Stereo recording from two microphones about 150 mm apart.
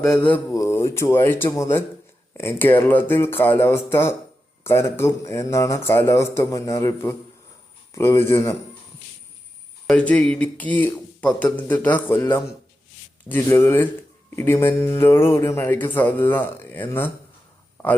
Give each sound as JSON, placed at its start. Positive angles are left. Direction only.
{"t": 0.0, "sound": "speech", "side_deg": 5}
{"t": 0.5, "sound": "speech", "side_deg": 20}
{"t": 9.8, "sound": "speech", "side_deg": 10}